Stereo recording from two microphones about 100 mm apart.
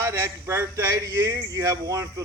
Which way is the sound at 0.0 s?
25° right (ahead or behind).